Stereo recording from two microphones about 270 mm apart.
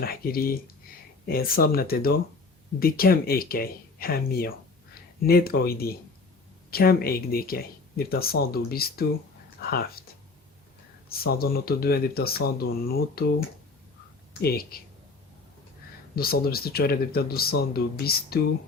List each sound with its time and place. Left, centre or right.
0.0 s speech: left
11.1 s speech: left
14.4 s speech: left
16.1 s speech: left